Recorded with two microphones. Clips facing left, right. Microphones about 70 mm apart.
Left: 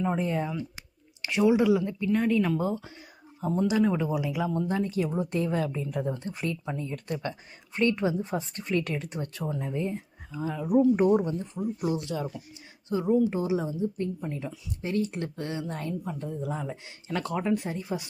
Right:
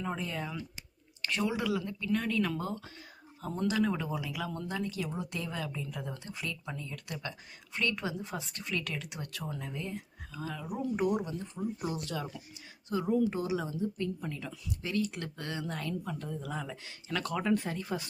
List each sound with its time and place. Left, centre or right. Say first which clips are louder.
0.2 s speech: left 9 dB; left
1.2 s speech: left 10 dB; centre
4.7 s speech: left 8 dB; left
11.0 s speech: left 8 dB; left
11.3 s speech: left 5 dB; centre
17.5 s speech: left 2 dB; centre